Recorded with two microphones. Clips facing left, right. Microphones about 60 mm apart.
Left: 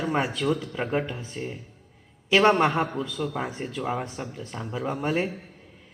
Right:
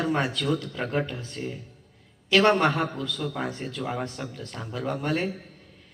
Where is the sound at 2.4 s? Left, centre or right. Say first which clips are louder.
Left 1 dB; centre.